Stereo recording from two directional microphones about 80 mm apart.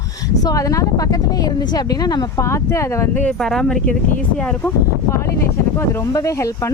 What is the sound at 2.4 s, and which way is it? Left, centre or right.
Speech, left.